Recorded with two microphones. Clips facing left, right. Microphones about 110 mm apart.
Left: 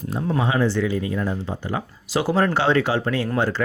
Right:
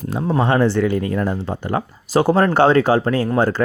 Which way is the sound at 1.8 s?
45° right (ahead or behind).